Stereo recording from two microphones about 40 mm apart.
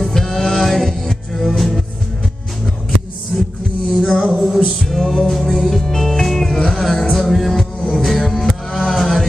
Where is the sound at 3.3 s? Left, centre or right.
Centre.